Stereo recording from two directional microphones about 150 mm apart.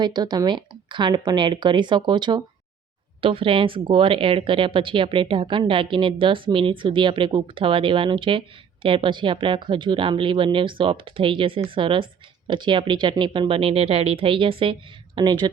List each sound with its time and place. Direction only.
0.0 s speech: 30° right (ahead or behind)